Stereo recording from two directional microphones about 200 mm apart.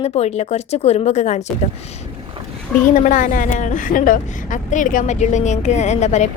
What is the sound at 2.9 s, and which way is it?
A woman's voice, 40° left (ahead or behind).